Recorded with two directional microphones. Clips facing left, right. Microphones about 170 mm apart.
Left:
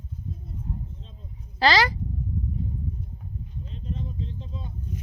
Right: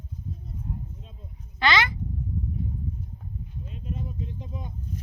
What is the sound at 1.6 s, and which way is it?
Speech, 35° left (ahead or behind).